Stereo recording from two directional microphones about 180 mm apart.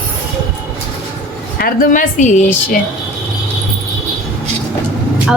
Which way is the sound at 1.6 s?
50° left (ahead or behind).